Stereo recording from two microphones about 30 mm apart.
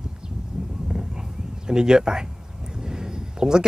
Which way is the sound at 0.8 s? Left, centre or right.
Right.